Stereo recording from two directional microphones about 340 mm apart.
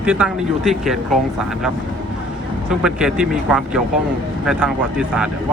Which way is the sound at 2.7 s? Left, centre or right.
Centre.